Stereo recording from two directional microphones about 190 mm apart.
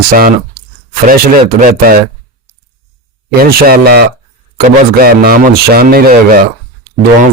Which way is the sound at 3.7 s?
55° right (ahead or behind).